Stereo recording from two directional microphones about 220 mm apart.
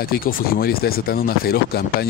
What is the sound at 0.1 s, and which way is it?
Speech, 40° left (ahead or behind).